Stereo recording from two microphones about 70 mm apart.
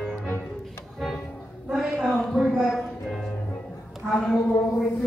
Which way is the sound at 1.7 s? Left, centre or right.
Centre.